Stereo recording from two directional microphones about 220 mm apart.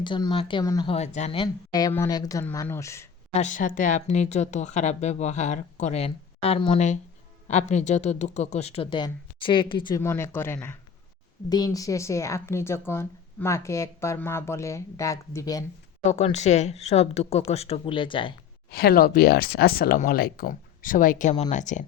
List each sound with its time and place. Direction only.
0.0 s speech: 20° left (ahead or behind)
3.3 s speech: 35° left (ahead or behind)
10.0 s speech: 10° left (ahead or behind)
16.0 s speech: 30° left (ahead or behind)
18.7 s speech: 45° left (ahead or behind)